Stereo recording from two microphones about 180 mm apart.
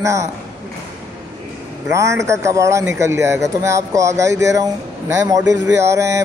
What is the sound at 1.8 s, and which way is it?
Speech, 15° right (ahead or behind).